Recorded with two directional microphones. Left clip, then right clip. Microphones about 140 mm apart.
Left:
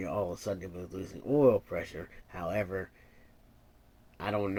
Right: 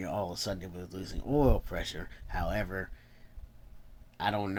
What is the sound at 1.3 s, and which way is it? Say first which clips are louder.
Speech: left 4 dB; 35° right (ahead or behind).